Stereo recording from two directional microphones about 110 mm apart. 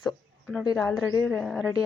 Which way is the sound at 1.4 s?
Centre (ahead or behind).